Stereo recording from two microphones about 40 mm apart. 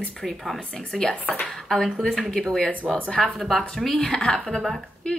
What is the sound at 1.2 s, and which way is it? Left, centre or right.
Speech, left.